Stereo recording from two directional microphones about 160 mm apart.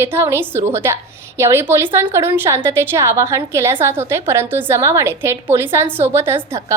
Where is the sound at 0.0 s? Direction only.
15° right (ahead or behind).